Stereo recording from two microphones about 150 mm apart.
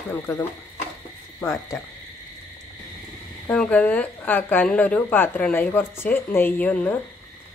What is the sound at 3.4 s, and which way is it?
A woman's voice, 5° left (ahead or behind).